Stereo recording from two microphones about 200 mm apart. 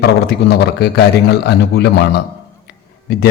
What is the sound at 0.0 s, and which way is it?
A man's voice, 55° left (ahead or behind).